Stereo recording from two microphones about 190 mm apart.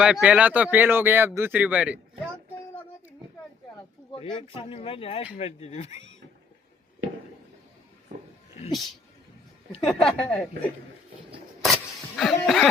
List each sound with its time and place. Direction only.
0.0 s speech: 5° right (ahead or behind)
4.1 s speech: 30° left (ahead or behind)
9.8 s speech: centre (ahead or behind)
11.6 s a sound: centre (ahead or behind)